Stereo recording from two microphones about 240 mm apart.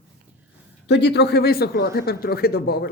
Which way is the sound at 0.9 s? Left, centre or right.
Left.